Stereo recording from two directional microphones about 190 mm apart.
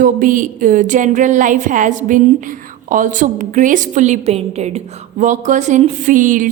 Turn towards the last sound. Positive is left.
turn(degrees=-45)  # may be behind; listen again after turning